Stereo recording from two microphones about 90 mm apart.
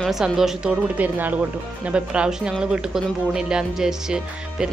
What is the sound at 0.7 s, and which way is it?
Speech, 20° right (ahead or behind).